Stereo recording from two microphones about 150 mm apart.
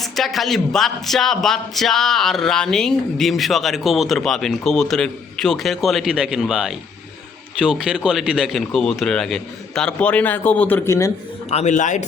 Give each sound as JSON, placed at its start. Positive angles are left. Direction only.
{"t": 0.0, "sound": "speech", "side_deg": 0}
{"t": 11.5, "sound": "speech", "side_deg": 55}